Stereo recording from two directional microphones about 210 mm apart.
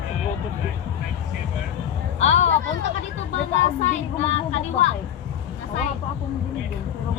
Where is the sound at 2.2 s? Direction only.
30° left (ahead or behind).